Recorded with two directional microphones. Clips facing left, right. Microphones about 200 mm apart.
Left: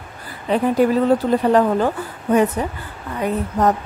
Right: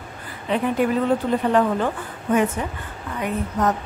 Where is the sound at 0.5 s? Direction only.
40° left (ahead or behind).